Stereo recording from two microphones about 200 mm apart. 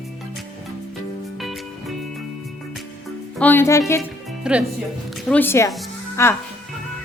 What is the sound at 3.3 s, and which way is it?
Music, 10° left (ahead or behind).